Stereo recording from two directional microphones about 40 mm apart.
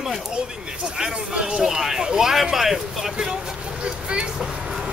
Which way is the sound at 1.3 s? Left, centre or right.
Centre.